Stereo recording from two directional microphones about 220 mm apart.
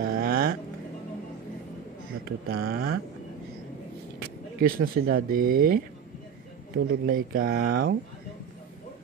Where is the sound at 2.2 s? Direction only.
45° right (ahead or behind).